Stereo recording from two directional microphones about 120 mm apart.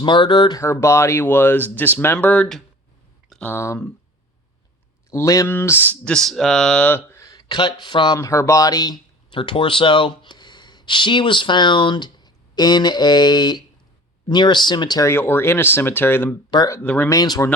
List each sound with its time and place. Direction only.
0.0 s speech: 40° left (ahead or behind)
0.6 s speech: 25° left (ahead or behind); by 2.6 s 5° left (ahead or behind)
3.2 s a sound: 5° left (ahead or behind)
3.5 s speech: 20° left (ahead or behind)
5.1 s speech: 30° left (ahead or behind)
6.1 s speech: 5° left (ahead or behind); by 7.4 s 25° left (ahead or behind)
7.4 s speech: 40° left (ahead or behind)
15.0 s speech: 20° left (ahead or behind)
16.5 s speech: 35° left (ahead or behind)
16.8 s speech: 10° left (ahead or behind)
17.1 s speech: 30° left (ahead or behind)